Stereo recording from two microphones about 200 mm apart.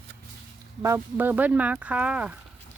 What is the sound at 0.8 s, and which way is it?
A woman's voice, 10° right (ahead or behind).